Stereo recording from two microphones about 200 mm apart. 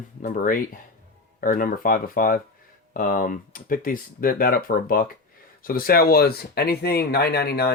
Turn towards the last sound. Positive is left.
turn(degrees=55)  # may be behind; listen again after turning